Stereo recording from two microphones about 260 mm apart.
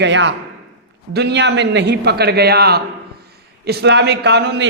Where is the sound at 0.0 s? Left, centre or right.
Right.